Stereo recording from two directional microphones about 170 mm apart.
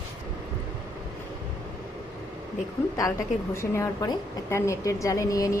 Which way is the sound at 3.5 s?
15° left (ahead or behind).